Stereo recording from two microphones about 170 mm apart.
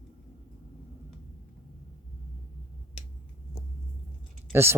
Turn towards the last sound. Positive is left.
turn(degrees=-15)  # may be behind; listen again after turning